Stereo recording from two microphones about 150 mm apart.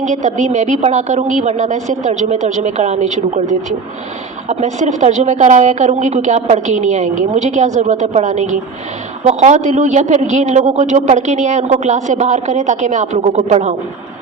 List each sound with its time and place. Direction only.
0.0 s speech: 55° right (ahead or behind)